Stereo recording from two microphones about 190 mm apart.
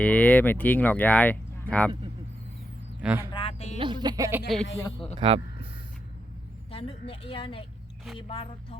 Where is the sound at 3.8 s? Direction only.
25° right (ahead or behind).